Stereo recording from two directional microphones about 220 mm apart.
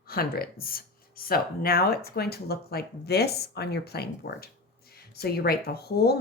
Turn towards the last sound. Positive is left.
turn(degrees=45)  # may be behind; listen again after turning